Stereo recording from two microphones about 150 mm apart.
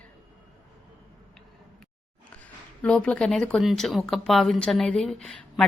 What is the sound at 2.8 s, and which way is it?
Speech, 5° left (ahead or behind).